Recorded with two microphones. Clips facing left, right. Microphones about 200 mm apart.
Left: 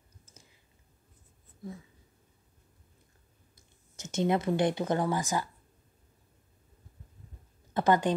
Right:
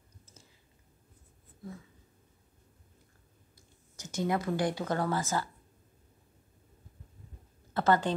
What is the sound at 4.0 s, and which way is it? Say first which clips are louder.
Speech: left 3 dB; 25° left (ahead or behind).